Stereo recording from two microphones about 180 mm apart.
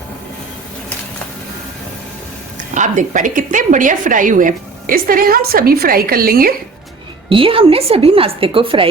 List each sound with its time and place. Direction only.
2.6 s a woman's voice: 45° right (ahead or behind)
7.3 s a woman's voice: 30° right (ahead or behind)